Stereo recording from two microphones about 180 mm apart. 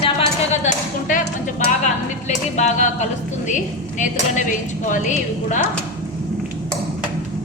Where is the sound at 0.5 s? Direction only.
45° left (ahead or behind).